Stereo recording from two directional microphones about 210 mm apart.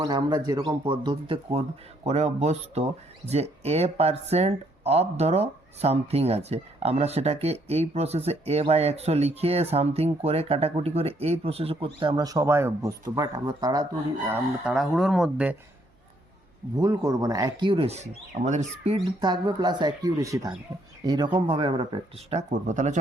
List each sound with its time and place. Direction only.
0.0 s speech: 20° right (ahead or behind)
14.3 s speech: 5° right (ahead or behind)
16.7 s speech: 15° right (ahead or behind); by 18.9 s 35° right (ahead or behind)
18.9 s speech: 20° right (ahead or behind); by 23.0 s 35° right (ahead or behind)